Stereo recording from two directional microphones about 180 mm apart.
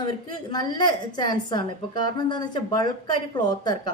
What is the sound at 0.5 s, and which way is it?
A woman's voice, 25° left (ahead or behind).